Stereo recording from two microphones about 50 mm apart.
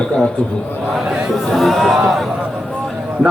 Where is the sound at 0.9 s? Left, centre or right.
Centre.